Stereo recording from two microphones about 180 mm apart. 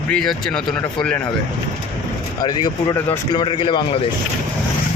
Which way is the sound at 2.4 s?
25° left (ahead or behind).